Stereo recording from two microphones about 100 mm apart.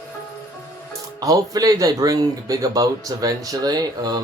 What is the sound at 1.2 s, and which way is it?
Speech, 40° right (ahead or behind).